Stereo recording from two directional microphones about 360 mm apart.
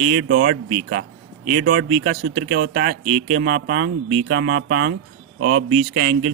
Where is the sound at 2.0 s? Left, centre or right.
Right.